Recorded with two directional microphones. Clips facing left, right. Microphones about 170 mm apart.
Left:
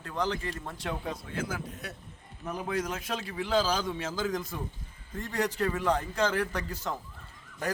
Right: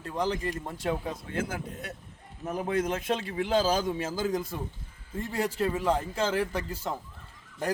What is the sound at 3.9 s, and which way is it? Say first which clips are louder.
Speech: right 2 dB; 10° right (ahead or behind).